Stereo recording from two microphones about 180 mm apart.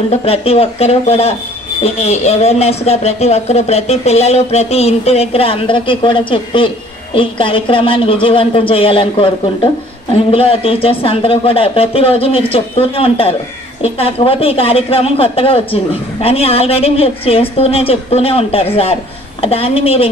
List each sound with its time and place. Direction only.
0.1 s a woman's voice: 35° left (ahead or behind)